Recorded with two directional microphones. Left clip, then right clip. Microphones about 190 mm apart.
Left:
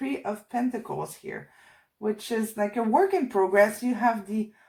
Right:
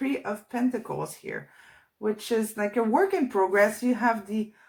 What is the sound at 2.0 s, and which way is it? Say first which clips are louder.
Speech: right 2 dB; 30° left (ahead or behind).